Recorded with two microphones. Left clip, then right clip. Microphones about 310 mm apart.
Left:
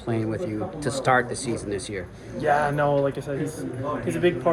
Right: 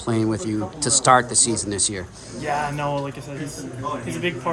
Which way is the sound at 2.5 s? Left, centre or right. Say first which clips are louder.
Left 3 dB; centre.